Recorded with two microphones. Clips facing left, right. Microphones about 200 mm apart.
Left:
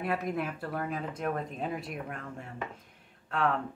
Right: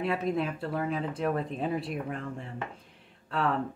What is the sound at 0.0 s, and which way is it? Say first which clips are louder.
Speech: right 3 dB; 25° right (ahead or behind).